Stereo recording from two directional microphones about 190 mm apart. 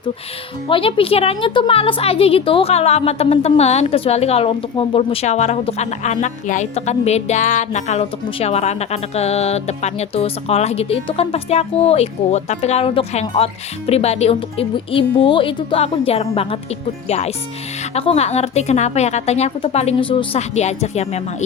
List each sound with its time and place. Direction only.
0.7 s a woman's voice: 30° left (ahead or behind)